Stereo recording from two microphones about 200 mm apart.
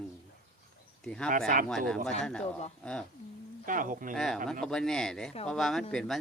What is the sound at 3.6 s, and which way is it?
Speech, 40° right (ahead or behind).